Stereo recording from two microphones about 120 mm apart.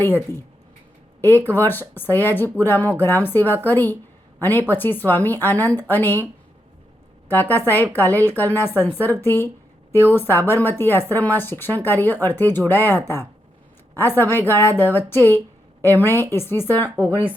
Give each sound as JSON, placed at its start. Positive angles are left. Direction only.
{"t": 0.0, "sound": "a woman's voice", "side_deg": 15}
{"t": 7.3, "sound": "a woman's voice", "side_deg": 15}